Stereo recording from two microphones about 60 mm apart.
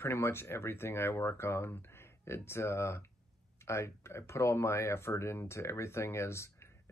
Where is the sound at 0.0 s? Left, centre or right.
Left.